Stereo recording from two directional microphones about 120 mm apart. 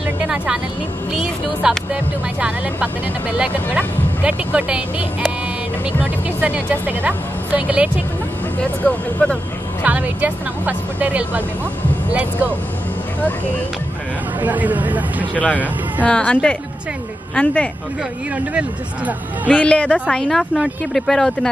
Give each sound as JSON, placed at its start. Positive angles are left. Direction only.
{"t": 0.2, "sound": "vehicle", "side_deg": -5}
{"t": 1.1, "sound": "speech", "side_deg": -5}
{"t": 3.3, "sound": "speech", "side_deg": -10}
{"t": 6.4, "sound": "speech", "side_deg": -15}
{"t": 8.8, "sound": "speech", "side_deg": 10}
{"t": 9.8, "sound": "speech", "side_deg": -15}
{"t": 14.4, "sound": "speech", "side_deg": -15}
{"t": 15.3, "sound": "speech", "side_deg": 15}
{"t": 18.3, "sound": "speech", "side_deg": -10}
{"t": 19.4, "sound": "speech", "side_deg": 10}